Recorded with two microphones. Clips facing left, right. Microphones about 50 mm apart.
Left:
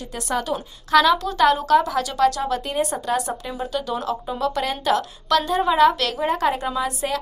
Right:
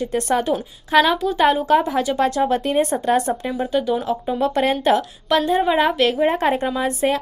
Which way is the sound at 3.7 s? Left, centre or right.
Centre.